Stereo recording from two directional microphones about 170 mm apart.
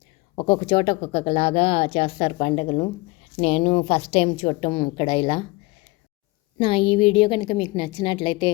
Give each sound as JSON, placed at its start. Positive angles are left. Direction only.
{"t": 0.3, "sound": "a woman's voice", "side_deg": 30}
{"t": 6.6, "sound": "a woman's voice", "side_deg": 30}